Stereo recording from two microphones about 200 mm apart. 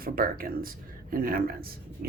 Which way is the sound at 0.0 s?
45° right (ahead or behind).